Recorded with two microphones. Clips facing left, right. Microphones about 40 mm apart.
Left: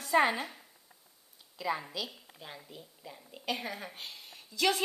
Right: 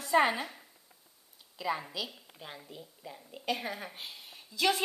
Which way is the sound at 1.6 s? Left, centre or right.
Centre.